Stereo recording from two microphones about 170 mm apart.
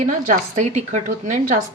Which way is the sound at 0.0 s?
50° right (ahead or behind).